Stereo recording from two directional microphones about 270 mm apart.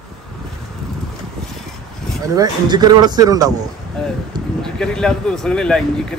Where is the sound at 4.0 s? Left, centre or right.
Centre.